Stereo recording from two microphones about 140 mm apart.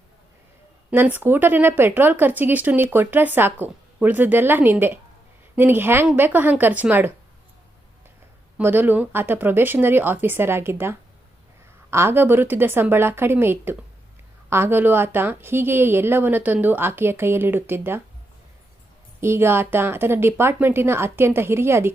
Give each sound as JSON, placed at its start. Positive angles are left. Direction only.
{"t": 0.9, "sound": "speech", "side_deg": -10}
{"t": 8.5, "sound": "speech", "side_deg": -15}
{"t": 19.2, "sound": "speech", "side_deg": -15}